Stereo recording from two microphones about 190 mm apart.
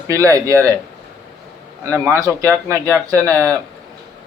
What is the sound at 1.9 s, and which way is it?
Speech, 10° right (ahead or behind).